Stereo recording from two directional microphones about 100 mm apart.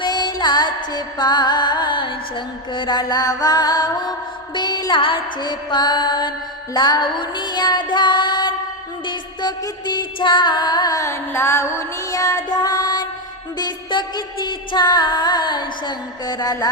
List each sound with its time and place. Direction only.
0.0 s music: 45° left (ahead or behind)